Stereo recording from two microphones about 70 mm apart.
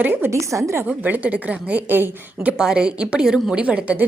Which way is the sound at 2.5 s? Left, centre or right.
Centre.